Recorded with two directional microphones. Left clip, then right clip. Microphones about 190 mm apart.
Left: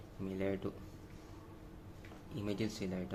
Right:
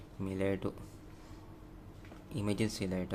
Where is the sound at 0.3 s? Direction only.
30° right (ahead or behind).